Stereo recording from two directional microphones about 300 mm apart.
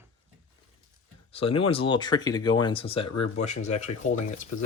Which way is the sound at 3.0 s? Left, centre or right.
Left.